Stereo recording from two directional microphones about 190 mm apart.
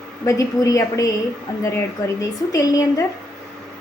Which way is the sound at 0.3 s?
15° left (ahead or behind).